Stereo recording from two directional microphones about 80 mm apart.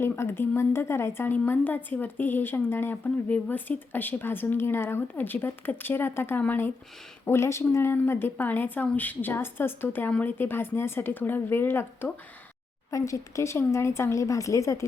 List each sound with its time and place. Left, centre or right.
0.0 s speech: left
12.9 s speech: left